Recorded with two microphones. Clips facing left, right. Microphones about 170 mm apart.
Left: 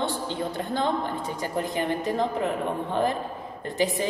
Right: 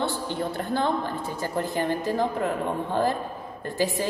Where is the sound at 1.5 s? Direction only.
20° left (ahead or behind).